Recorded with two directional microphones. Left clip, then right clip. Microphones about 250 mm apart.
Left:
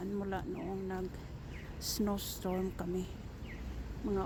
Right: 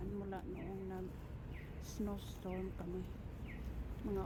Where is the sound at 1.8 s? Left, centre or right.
Left.